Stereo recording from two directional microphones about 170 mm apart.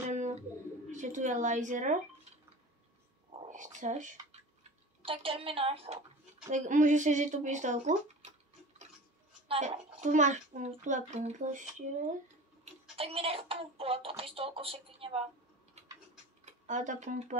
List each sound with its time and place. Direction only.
0.1 s bird: 45° right (ahead or behind)
0.9 s a child's voice: 45° right (ahead or behind)
3.3 s a sound: 30° right (ahead or behind)
3.7 s a child's voice: 45° right (ahead or behind)
5.0 s music: 35° right (ahead or behind)
6.5 s a child's voice: 45° right (ahead or behind)
9.5 s a child's voice: 45° right (ahead or behind)
12.9 s music: 35° right (ahead or behind)
16.4 s speech: 45° right (ahead or behind)